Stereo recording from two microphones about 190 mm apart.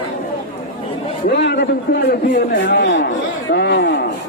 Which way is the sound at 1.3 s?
60° left (ahead or behind).